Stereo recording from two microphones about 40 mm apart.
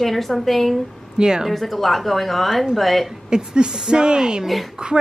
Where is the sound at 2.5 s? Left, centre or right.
Centre.